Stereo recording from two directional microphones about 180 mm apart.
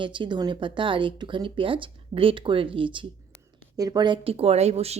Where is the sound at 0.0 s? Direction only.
25° right (ahead or behind).